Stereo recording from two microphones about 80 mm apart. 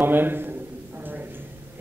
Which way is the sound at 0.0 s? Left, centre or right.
Right.